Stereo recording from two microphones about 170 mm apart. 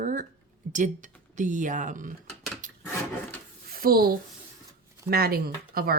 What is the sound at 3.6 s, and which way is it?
Speech, 60° right (ahead or behind).